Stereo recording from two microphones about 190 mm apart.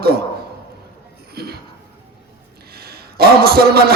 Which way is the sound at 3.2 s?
55° right (ahead or behind).